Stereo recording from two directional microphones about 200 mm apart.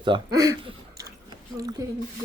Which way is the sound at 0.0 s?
20° right (ahead or behind).